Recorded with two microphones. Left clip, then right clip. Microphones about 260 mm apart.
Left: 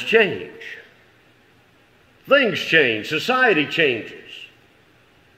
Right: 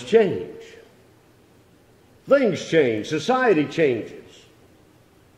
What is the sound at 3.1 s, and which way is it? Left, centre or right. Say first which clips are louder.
Speech: left 1 dB; left.